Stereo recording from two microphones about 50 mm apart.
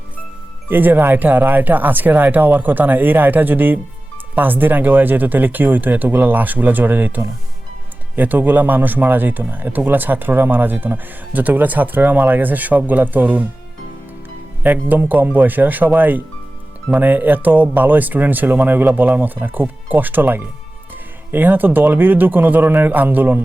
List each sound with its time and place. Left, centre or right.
0.7 s a man's voice: right
14.6 s a man's voice: right